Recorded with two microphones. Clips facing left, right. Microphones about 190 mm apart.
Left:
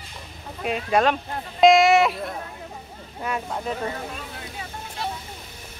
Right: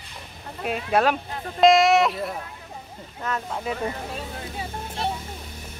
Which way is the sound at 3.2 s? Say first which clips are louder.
Left 1 dB; 10° left (ahead or behind).